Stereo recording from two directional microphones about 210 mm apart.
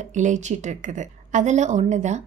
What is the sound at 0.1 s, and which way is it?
A woman's voice, 35° right (ahead or behind).